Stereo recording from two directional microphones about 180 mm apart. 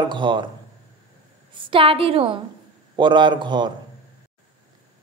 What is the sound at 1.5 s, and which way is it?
A woman's voice, 30° right (ahead or behind).